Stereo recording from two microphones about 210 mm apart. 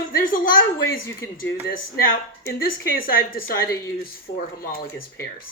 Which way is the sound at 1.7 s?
40° left (ahead or behind).